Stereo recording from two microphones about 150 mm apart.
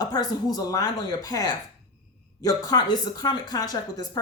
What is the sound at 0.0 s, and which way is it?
Speech, 25° left (ahead or behind).